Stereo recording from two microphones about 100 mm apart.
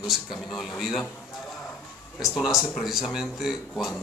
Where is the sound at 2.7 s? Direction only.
Centre (ahead or behind).